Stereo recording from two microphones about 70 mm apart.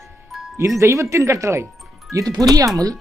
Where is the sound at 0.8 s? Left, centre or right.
Right.